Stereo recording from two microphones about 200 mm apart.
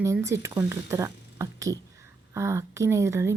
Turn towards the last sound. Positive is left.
turn(degrees=-15)  # may be behind; listen again after turning